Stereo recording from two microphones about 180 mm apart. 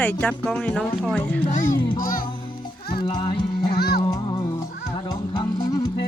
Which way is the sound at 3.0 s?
25° left (ahead or behind).